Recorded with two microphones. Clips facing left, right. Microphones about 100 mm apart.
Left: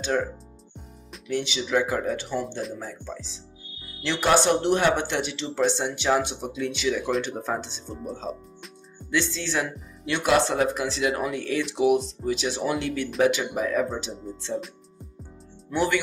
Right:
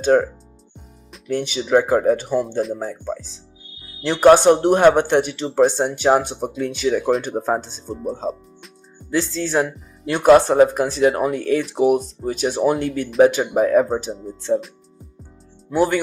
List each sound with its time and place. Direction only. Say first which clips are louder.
0.0 s speech: right 10 dB; 45° right (ahead or behind)
1.3 s speech: right 7 dB; 45° right (ahead or behind)
9.0 s speech: right 5 dB; 40° right (ahead or behind)
14.3 s speech: right 4 dB; centre (ahead or behind)
15.7 s speech: right 6 dB; 40° right (ahead or behind)